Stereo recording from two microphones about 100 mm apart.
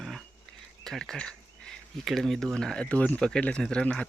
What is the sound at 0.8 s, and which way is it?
Speech, 5° left (ahead or behind).